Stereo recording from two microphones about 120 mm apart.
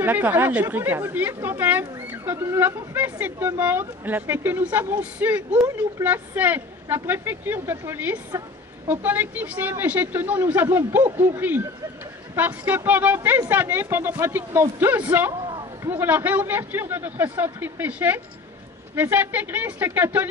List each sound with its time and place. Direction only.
0.0 s speech: 15° right (ahead or behind)